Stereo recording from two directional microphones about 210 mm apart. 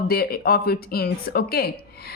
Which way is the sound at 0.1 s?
45° left (ahead or behind).